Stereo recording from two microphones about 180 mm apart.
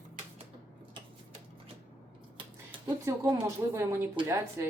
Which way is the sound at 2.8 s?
15° right (ahead or behind).